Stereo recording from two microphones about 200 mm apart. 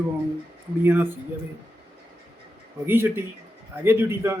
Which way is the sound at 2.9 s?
10° right (ahead or behind).